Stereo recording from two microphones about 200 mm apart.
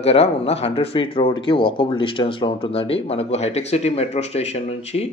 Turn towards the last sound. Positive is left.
turn(degrees=30)  # may be behind; listen again after turning